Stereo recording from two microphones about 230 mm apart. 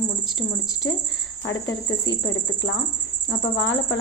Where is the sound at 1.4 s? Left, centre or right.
Left.